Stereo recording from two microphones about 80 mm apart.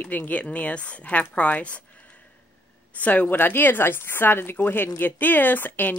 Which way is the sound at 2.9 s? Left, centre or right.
Centre.